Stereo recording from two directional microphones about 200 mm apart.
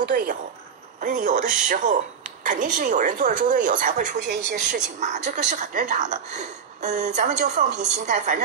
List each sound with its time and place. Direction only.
0.0 s a woman's voice: 45° right (ahead or behind)
4.3 s speech: 55° right (ahead or behind)
5.0 s speech: 35° right (ahead or behind)